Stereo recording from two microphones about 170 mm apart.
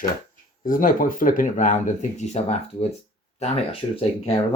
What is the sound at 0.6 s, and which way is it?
Speech, 55° left (ahead or behind).